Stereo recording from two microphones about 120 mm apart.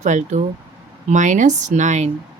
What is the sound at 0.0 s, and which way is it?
Speech, 85° right.